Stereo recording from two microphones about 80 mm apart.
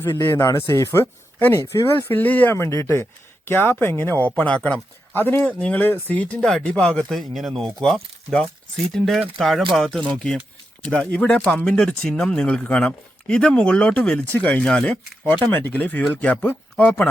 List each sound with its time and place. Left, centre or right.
0.4 s speech: left; by 7.0 s centre
7.1 s speech: centre
11.0 s speech: centre